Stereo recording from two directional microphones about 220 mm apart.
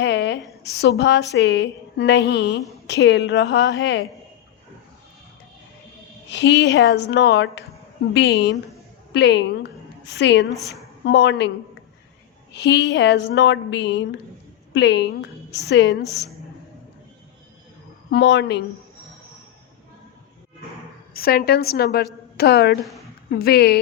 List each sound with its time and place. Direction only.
0.0 s a woman's voice: 50° left (ahead or behind)
6.3 s a woman's voice: 55° left (ahead or behind)
12.5 s a woman's voice: 50° left (ahead or behind)
18.1 s a woman's voice: 50° left (ahead or behind)
21.1 s a woman's voice: 45° left (ahead or behind)
22.8 s a woman's voice: centre (ahead or behind)
23.3 s a woman's voice: 45° left (ahead or behind)